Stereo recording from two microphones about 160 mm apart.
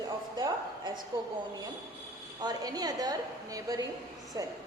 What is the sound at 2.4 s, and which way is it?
A woman's voice, 25° right (ahead or behind).